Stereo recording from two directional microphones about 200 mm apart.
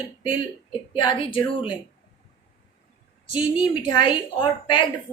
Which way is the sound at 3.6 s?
25° left (ahead or behind).